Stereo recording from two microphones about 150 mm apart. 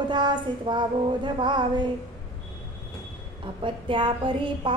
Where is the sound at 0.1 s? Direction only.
30° right (ahead or behind).